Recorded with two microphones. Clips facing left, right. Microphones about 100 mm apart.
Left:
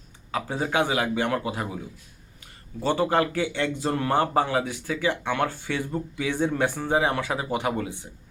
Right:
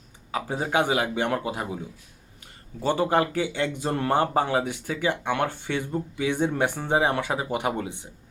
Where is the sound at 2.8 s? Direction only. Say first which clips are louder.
Even; 15° right (ahead or behind).